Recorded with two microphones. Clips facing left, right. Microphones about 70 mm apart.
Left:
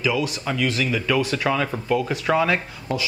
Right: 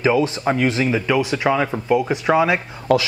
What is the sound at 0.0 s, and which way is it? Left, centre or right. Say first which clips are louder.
Speech: right 6 dB; right.